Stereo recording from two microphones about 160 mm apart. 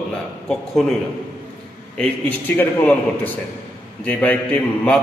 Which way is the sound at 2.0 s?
10° left (ahead or behind).